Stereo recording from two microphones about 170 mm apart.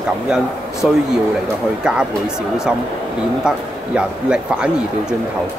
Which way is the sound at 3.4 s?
5° right (ahead or behind).